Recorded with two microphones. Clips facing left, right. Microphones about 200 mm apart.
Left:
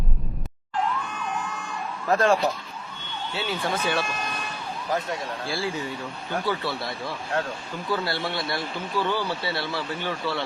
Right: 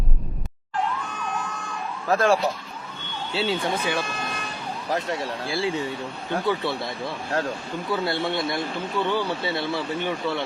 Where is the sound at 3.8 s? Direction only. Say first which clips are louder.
Even; 15° right (ahead or behind).